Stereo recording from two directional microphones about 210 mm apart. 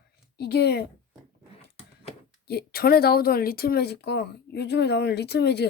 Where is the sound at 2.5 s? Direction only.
50° left (ahead or behind).